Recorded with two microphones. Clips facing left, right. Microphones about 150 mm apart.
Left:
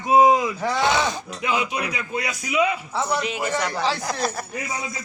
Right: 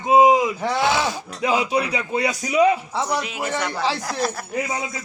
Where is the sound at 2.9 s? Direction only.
15° right (ahead or behind).